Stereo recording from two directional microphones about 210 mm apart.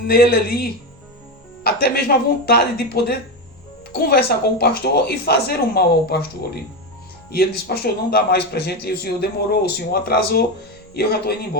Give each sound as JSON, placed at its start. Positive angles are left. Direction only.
{"t": 0.0, "sound": "a man's voice", "side_deg": 45}
{"t": 7.3, "sound": "a man's voice", "side_deg": 50}